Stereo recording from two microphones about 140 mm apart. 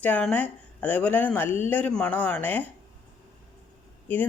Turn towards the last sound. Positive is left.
turn(degrees=10)  # may be behind; listen again after turning